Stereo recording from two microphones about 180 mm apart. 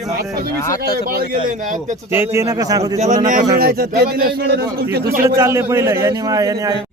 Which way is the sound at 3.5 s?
55° right (ahead or behind).